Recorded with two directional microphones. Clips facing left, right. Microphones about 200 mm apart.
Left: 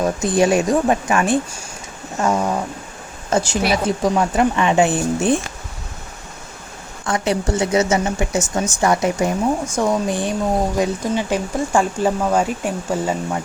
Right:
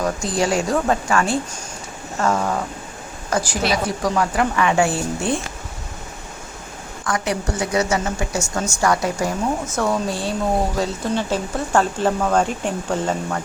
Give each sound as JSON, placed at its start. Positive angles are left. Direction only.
{"t": 0.0, "sound": "speech", "side_deg": 20}
{"t": 7.0, "sound": "speech", "side_deg": 25}